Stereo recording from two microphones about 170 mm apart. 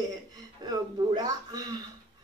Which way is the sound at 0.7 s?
25° right (ahead or behind).